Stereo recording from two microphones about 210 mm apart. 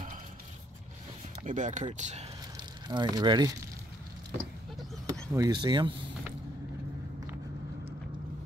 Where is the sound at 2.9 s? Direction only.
20° right (ahead or behind).